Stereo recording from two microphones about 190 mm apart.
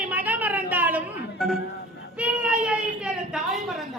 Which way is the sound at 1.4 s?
Centre (ahead or behind).